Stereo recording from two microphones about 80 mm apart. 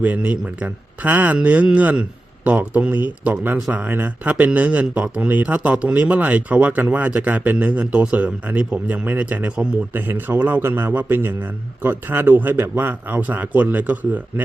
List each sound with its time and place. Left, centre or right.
0.0 s a man's voice: centre